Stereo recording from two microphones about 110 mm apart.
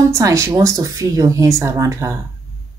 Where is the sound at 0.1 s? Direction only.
30° right (ahead or behind).